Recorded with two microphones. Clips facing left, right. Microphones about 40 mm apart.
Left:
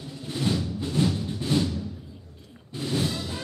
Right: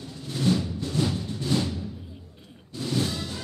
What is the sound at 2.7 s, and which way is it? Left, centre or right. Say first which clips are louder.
Music: even; centre.